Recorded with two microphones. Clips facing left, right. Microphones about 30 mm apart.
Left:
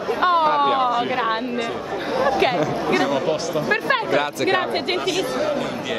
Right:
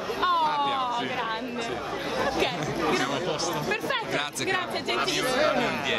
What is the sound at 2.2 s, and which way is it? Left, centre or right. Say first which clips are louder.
Speech: left 8 dB; left.